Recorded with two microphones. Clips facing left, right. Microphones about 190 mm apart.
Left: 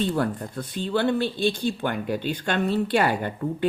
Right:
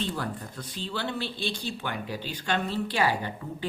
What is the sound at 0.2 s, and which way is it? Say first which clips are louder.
Speech: left 8 dB; 55° left (ahead or behind).